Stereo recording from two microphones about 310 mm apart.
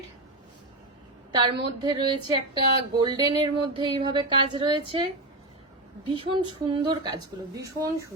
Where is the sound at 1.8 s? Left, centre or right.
Centre.